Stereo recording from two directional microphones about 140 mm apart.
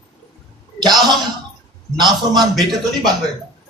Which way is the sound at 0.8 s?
30° right (ahead or behind).